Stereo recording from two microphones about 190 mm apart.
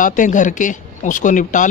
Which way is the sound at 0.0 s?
45° left (ahead or behind).